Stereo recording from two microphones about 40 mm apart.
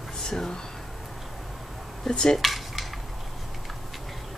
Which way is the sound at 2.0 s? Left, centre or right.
Centre.